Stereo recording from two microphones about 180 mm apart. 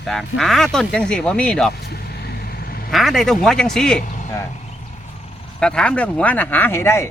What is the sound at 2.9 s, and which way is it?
Speech, centre (ahead or behind).